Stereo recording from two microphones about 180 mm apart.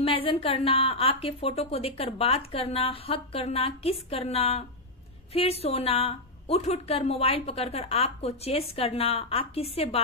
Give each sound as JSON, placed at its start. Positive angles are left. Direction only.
{"t": 0.0, "sound": "a woman's voice", "side_deg": 30}